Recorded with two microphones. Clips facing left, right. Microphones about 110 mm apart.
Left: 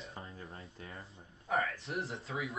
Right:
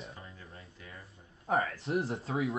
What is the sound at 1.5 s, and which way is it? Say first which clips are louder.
Speech: right 4 dB; 30° right (ahead or behind).